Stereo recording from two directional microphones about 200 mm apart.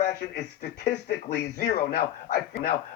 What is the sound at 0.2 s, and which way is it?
Speech, 55° left (ahead or behind).